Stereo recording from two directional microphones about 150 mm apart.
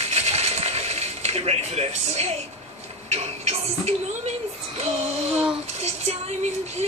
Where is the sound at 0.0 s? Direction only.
45° right (ahead or behind).